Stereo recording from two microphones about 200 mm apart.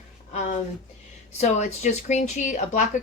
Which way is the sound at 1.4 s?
35° left (ahead or behind).